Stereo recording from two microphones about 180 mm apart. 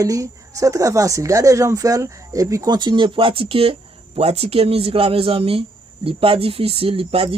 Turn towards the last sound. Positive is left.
turn(degrees=-30)  # may be behind; listen again after turning